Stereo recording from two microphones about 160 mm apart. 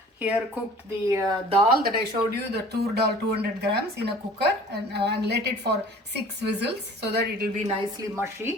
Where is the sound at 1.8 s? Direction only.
75° right (ahead or behind).